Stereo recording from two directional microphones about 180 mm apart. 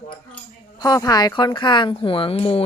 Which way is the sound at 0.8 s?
20° left (ahead or behind).